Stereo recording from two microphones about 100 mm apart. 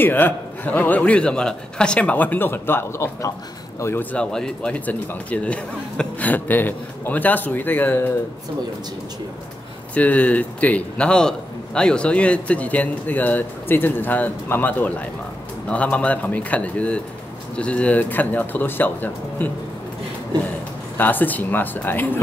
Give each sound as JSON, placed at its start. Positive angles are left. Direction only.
{"t": 0.0, "sound": "a man's voice", "side_deg": 20}
{"t": 3.8, "sound": "a man's voice", "side_deg": 20}
{"t": 9.9, "sound": "a man's voice", "side_deg": 15}
{"t": 21.0, "sound": "speech", "side_deg": 20}